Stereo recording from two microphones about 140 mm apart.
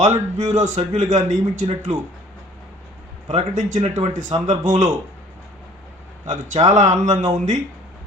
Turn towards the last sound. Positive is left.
turn(degrees=-30)  # may be behind; listen again after turning